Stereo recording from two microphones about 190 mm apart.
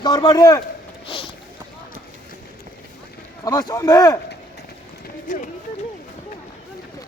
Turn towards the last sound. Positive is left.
turn(degrees=40)  # may be behind; listen again after turning